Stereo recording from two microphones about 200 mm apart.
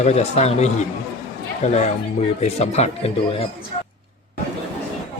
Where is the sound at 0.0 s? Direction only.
35° left (ahead or behind).